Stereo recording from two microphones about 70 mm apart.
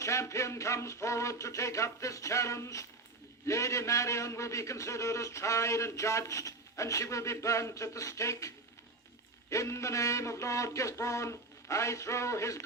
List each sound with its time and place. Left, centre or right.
0.0 s a man's voice: left